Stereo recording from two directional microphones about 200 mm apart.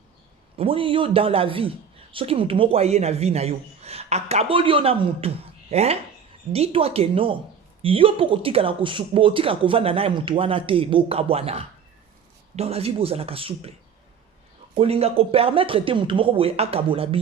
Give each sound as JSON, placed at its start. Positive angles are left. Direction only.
{"t": 0.5, "sound": "speech", "side_deg": -25}
{"t": 14.8, "sound": "speech", "side_deg": -30}